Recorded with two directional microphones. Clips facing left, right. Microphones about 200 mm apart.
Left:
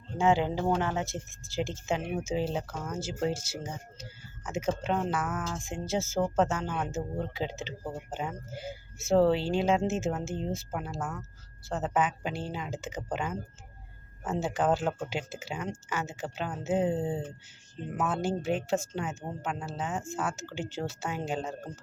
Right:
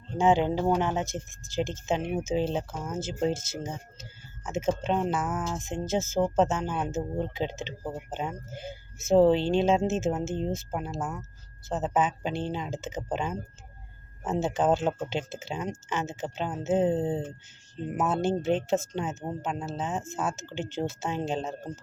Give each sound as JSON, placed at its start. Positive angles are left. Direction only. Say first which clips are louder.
{"t": 0.2, "sound": "speech", "louder": "right 3 dB", "side_deg": -20}